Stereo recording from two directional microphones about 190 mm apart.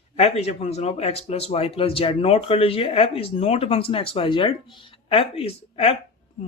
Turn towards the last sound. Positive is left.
turn(degrees=30)  # may be behind; listen again after turning